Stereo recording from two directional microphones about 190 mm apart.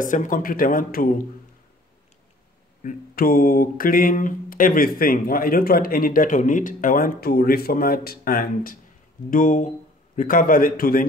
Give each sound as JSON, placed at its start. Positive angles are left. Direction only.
{"t": 0.0, "sound": "mantra", "side_deg": 45}
{"t": 2.8, "sound": "mantra", "side_deg": 45}